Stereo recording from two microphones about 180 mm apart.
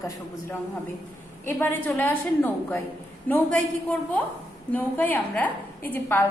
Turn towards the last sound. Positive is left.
turn(degrees=10)  # may be behind; listen again after turning